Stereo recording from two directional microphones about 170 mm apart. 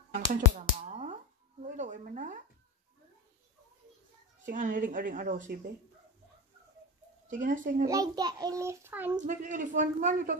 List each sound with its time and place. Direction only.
0.6 s a sound: 40° right (ahead or behind)
1.6 s speech: 45° right (ahead or behind)
4.5 s speech: 50° right (ahead or behind)
7.2 s speech: 50° right (ahead or behind)
7.8 s a child's voice: 20° right (ahead or behind)
9.1 s speech: 50° right (ahead or behind)